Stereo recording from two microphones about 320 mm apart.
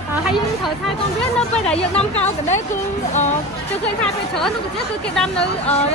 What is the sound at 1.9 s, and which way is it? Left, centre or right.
Speech, centre.